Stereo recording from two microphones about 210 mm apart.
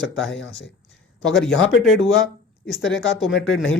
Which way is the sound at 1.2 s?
Centre (ahead or behind).